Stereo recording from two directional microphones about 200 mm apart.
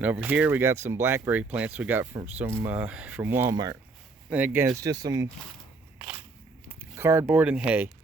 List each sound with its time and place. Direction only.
0.0 s speech: 10° right (ahead or behind)
4.3 s speech: 5° right (ahead or behind)
6.7 s speech: 10° right (ahead or behind)